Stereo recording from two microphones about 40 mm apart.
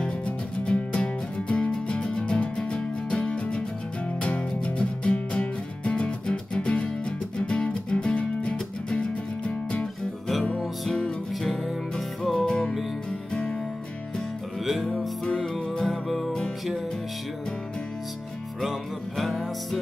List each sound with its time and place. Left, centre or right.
0.7 s music: left
4.7 s music: left
10.9 s music: left
11.4 s music: centre
12.4 s music: centre
14.6 s music: centre
15.2 s music: centre
15.8 s music: centre
18.6 s music: centre